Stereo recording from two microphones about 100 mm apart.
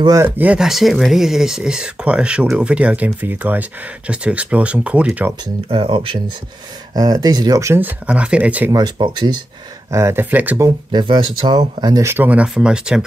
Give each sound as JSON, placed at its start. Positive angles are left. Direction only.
{"t": 0.0, "sound": "speech", "side_deg": -35}
{"t": 0.4, "sound": "speech", "side_deg": -10}
{"t": 5.7, "sound": "speech", "side_deg": -60}
{"t": 7.0, "sound": "speech", "side_deg": -40}
{"t": 7.8, "sound": "speech", "side_deg": -10}
{"t": 8.9, "sound": "speech", "side_deg": -55}
{"t": 9.8, "sound": "speech", "side_deg": -30}
{"t": 10.9, "sound": "speech", "side_deg": -50}
{"t": 12.0, "sound": "speech", "side_deg": -25}
{"t": 12.3, "sound": "speech", "side_deg": -10}